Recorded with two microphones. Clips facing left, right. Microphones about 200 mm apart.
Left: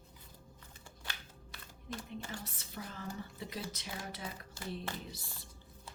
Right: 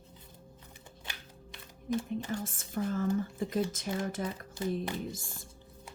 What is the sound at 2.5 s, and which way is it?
Speech, 50° right (ahead or behind).